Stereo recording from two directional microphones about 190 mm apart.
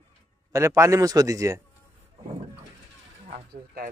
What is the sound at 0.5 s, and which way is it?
Speech, 15° right (ahead or behind).